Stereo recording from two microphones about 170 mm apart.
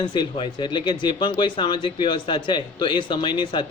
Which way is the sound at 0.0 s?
30° left (ahead or behind).